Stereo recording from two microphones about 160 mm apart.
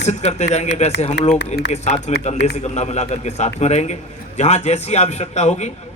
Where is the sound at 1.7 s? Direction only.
45° left (ahead or behind).